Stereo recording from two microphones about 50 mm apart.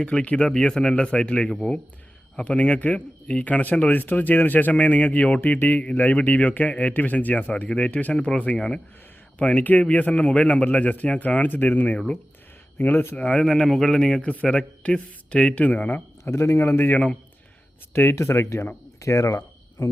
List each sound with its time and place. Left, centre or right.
0.0 s speech: left
5.4 s speech: left; by 8.8 s centre
9.4 s speech: left
12.8 s a man's voice: left
13.1 s speech: left
14.2 s speech: left
16.2 s a man's voice: left
17.9 s speech: left
19.0 s speech: left
19.8 s speech: left